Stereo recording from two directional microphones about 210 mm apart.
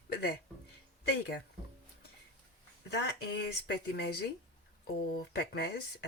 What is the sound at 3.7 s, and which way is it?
Speech, 50° left (ahead or behind).